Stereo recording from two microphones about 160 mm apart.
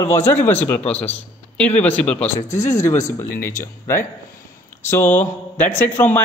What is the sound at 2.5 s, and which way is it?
Speech, 20° left (ahead or behind).